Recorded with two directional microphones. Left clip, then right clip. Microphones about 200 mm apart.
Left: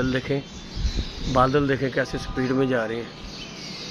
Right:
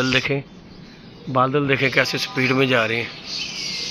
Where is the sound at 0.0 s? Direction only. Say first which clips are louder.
Right 5 dB; 10° right (ahead or behind).